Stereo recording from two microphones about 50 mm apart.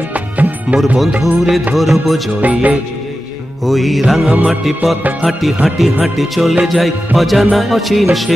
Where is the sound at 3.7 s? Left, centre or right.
Centre.